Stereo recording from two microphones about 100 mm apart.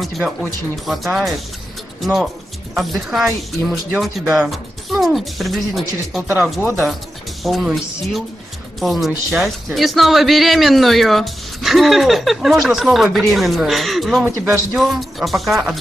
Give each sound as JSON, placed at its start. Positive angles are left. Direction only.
{"t": 0.8, "sound": "a man's voice", "side_deg": 0}
{"t": 2.7, "sound": "a man's voice", "side_deg": 0}
{"t": 6.2, "sound": "speech", "side_deg": -20}
{"t": 6.5, "sound": "a man's voice", "side_deg": 0}